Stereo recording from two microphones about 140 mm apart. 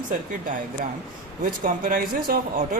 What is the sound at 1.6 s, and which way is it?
Speech, 85° right.